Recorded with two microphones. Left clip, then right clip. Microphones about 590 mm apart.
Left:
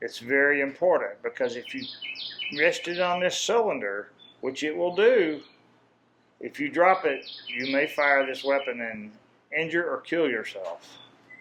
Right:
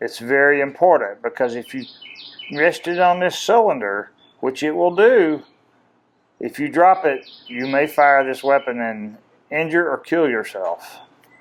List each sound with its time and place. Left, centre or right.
0.0 s speech: right
6.4 s speech: right